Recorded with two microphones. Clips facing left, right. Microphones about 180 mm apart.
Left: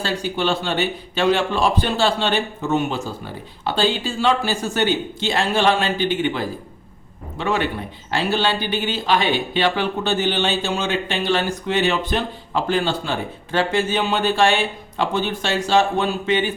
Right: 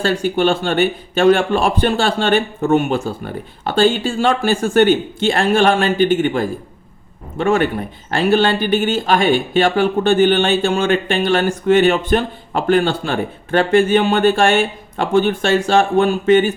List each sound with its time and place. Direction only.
0.0 s speech: 50° right (ahead or behind)